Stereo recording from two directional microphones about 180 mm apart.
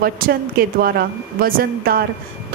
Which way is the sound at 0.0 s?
55° right (ahead or behind).